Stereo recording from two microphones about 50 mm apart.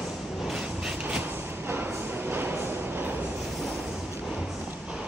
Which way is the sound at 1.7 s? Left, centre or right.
Right.